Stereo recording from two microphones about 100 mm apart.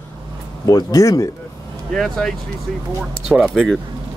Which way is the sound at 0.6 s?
35° left (ahead or behind).